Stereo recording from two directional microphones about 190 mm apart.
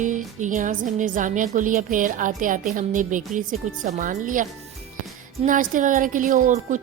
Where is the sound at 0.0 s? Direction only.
40° right (ahead or behind).